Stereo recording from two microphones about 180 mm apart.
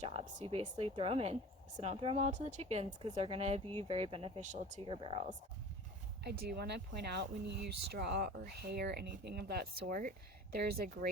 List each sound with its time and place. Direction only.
0.0 s speech: 35° right (ahead or behind)
4.8 s speech: 30° right (ahead or behind)
6.2 s speech: 60° right (ahead or behind)